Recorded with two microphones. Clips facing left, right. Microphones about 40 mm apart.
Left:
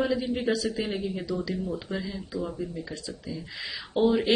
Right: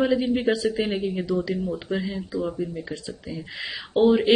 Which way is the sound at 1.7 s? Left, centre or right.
Right.